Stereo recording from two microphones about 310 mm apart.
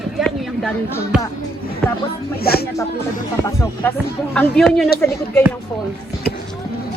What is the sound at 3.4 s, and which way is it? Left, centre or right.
Speech, centre.